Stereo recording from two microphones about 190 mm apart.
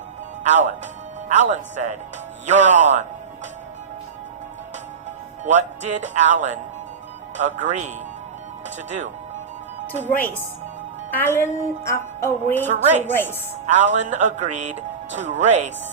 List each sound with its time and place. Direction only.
0.4 s speech: 40° right (ahead or behind)
5.5 s speech: 40° right (ahead or behind)
11.1 s music: 10° left (ahead or behind)
12.6 s speech: 40° right (ahead or behind)
13.1 s music: 10° left (ahead or behind)
13.7 s speech: 40° right (ahead or behind)